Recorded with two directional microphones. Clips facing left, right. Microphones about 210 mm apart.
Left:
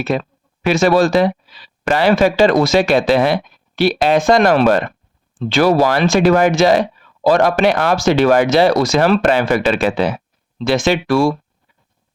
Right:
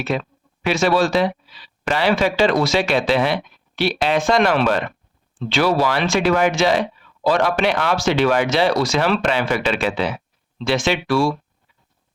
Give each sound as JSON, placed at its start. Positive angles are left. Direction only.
{"t": 0.1, "sound": "speech", "side_deg": 45}